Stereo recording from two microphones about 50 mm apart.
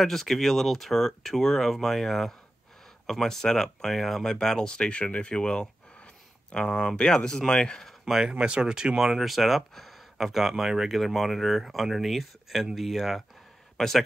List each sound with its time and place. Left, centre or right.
0.0 s speech: centre
8.0 s a man's voice: centre